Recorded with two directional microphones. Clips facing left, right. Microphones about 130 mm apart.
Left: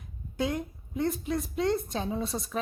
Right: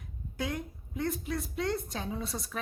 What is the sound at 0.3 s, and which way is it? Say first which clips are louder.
Speech: left 5 dB; 25° left (ahead or behind).